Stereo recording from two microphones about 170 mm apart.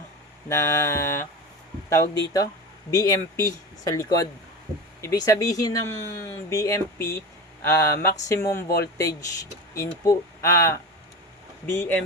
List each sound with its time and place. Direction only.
0.4 s speech: 15° left (ahead or behind)
9.7 s speech: 20° left (ahead or behind)